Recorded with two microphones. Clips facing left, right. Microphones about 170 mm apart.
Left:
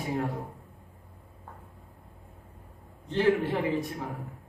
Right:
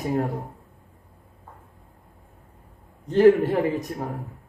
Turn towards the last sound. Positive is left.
turn(degrees=-45)  # may be behind; listen again after turning